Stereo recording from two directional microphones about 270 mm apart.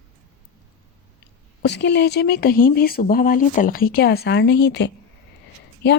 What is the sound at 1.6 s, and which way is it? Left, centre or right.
Speech, left.